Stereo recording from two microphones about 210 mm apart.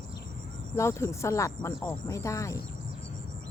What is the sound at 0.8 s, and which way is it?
Speech, 15° left (ahead or behind).